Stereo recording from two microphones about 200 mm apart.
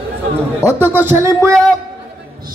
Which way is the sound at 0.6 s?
10° right (ahead or behind).